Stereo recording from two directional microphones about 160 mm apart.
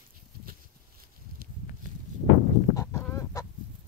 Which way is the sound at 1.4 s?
70° right (ahead or behind).